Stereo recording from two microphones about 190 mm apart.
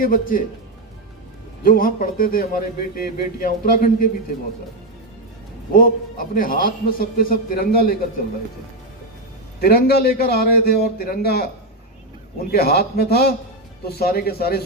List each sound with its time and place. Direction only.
0.0 s a man's voice: 50° left (ahead or behind)
1.6 s a man's voice: 50° left (ahead or behind)
5.7 s a man's voice: 45° left (ahead or behind)
9.6 s a man's voice: 55° left (ahead or behind)
12.5 s a man's voice: 55° left (ahead or behind)